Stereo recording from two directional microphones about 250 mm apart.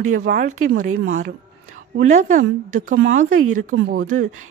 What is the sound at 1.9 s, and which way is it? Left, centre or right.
Speech, right.